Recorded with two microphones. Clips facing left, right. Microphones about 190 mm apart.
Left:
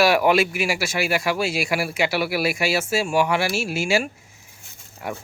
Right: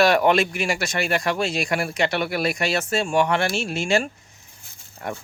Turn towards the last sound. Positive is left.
turn(degrees=5)  # may be behind; listen again after turning